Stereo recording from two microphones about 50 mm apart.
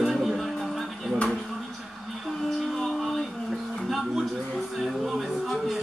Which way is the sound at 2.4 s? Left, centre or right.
Centre.